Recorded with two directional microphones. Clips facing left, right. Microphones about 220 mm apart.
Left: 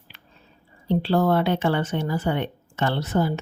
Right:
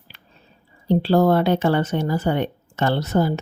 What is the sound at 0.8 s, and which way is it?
A woman's voice, 40° right (ahead or behind).